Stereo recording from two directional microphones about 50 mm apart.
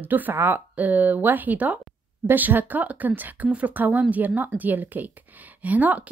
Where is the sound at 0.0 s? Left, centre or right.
Right.